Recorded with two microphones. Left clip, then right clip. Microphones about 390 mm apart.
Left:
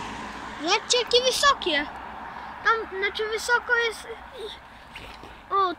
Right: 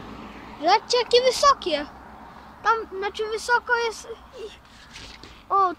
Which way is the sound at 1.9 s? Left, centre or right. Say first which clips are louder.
Left 7 dB; left.